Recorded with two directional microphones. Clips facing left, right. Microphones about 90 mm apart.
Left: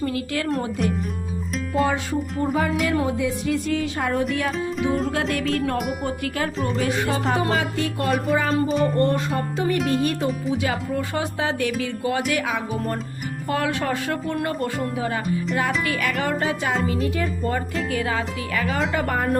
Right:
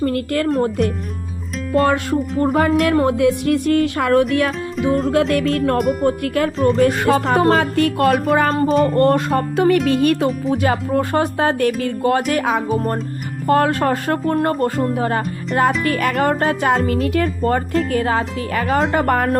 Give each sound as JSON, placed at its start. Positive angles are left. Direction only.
{"t": 0.0, "sound": "speech", "side_deg": -50}
{"t": 1.8, "sound": "speech", "side_deg": -65}
{"t": 2.4, "sound": "speech", "side_deg": -50}
{"t": 2.8, "sound": "speech", "side_deg": -60}
{"t": 4.8, "sound": "music", "side_deg": 0}
{"t": 5.3, "sound": "speech", "side_deg": -55}
{"t": 5.8, "sound": "speech", "side_deg": 5}
{"t": 6.1, "sound": "speech", "side_deg": -55}
{"t": 7.3, "sound": "speech", "side_deg": -45}
{"t": 9.0, "sound": "speech", "side_deg": -60}
{"t": 19.1, "sound": "a woman's voice", "side_deg": -75}